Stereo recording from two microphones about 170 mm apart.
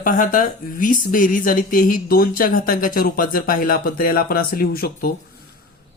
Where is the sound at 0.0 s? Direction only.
50° left (ahead or behind).